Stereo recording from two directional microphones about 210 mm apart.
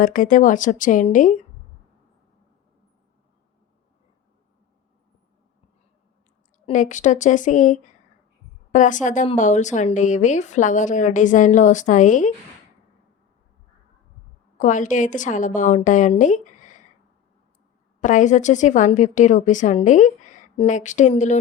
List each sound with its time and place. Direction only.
0.0 s a woman's voice: 40° left (ahead or behind)
6.7 s a woman's voice: 35° left (ahead or behind)
14.6 s a woman's voice: 35° left (ahead or behind)
18.0 s a woman's voice: 35° left (ahead or behind)